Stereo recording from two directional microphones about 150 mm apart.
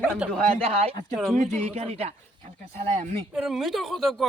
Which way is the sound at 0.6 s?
40° right (ahead or behind).